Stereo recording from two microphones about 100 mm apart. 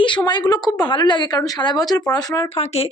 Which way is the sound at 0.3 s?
45° left (ahead or behind).